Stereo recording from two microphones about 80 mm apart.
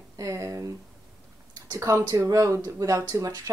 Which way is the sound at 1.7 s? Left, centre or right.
Right.